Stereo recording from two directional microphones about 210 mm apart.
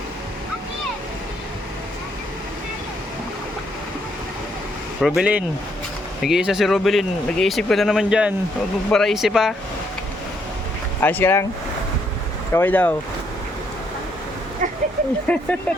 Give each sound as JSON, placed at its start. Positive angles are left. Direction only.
{"t": 4.9, "sound": "speech", "side_deg": 0}
{"t": 11.0, "sound": "speech", "side_deg": 10}
{"t": 12.5, "sound": "speech", "side_deg": 10}
{"t": 14.6, "sound": "a sound", "side_deg": -35}
{"t": 15.3, "sound": "speech", "side_deg": 5}